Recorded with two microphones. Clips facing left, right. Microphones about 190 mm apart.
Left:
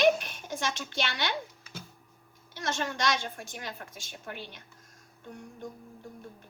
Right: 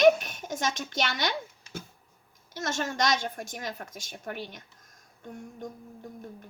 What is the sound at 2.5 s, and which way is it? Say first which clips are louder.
A woman's voice: right 2 dB; 45° right (ahead or behind).